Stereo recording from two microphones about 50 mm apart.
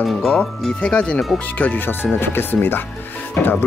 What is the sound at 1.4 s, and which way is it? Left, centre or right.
Speech, left.